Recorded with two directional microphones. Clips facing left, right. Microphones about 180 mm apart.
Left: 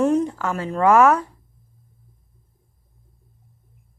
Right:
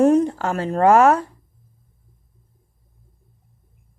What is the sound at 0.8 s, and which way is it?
Speech, 30° right (ahead or behind).